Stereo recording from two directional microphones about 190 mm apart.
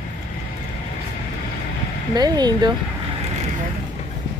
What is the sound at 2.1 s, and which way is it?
Speech, 20° right (ahead or behind).